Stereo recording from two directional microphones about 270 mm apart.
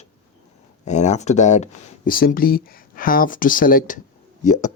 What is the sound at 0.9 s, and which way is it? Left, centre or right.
Speech, left.